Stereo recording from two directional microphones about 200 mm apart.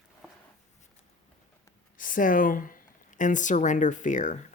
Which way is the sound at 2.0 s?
40° left (ahead or behind).